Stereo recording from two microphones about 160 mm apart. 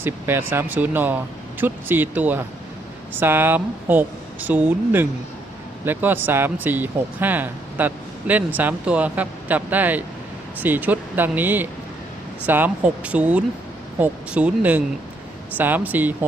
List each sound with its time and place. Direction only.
0.0 s speech: 15° right (ahead or behind)